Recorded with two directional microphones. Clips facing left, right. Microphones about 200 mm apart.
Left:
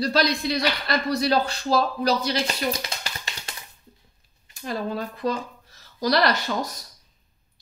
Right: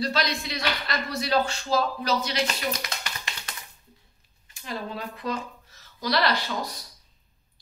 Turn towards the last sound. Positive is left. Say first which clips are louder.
# left 3 dB
turn(degrees=45)  # may be behind; listen again after turning